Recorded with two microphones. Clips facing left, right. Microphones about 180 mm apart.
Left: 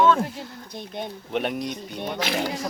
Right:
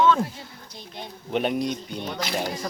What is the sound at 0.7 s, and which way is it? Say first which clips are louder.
Speech: left 7 dB; 55° left (ahead or behind).